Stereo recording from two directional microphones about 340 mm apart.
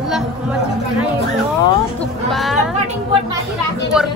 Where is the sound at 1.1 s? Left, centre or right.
Centre.